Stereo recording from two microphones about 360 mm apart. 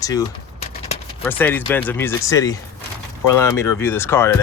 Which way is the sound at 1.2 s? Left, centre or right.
Centre.